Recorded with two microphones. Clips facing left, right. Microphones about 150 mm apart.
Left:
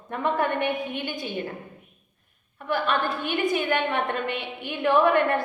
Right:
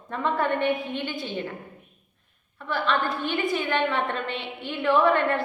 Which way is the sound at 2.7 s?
15° left (ahead or behind).